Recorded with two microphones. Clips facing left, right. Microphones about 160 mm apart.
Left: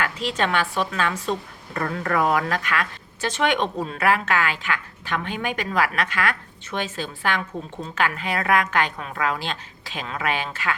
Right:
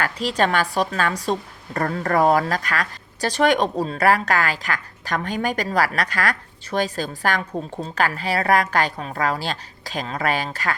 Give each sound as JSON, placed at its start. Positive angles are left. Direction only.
{"t": 0.0, "sound": "a woman's voice", "side_deg": -40}